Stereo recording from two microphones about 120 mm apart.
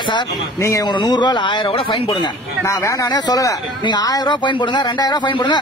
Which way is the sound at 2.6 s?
25° left (ahead or behind).